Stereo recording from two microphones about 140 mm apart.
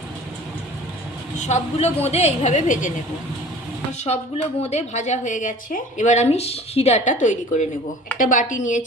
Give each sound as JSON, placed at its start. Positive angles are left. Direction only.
{"t": 1.5, "sound": "a woman's voice", "side_deg": 50}
{"t": 4.0, "sound": "a woman's voice", "side_deg": 50}